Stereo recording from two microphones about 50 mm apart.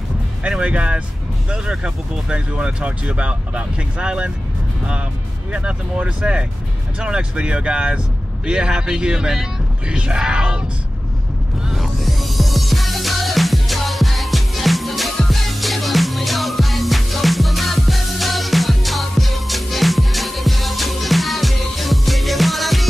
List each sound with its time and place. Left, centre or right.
0.4 s speech: right
5.5 s speech: right
11.7 s music: centre